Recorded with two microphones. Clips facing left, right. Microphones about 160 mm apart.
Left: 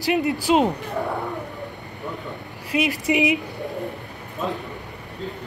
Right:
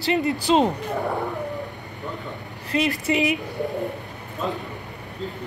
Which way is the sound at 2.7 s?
10° left (ahead or behind).